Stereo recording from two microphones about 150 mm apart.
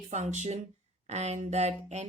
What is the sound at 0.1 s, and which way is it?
Speech, 50° right (ahead or behind).